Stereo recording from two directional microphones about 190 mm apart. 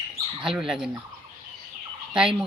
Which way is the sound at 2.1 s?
5° right (ahead or behind).